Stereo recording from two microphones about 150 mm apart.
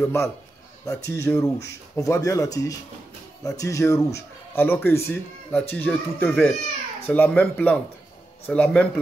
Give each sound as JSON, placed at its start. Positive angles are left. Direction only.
{"t": 0.0, "sound": "speech", "side_deg": 20}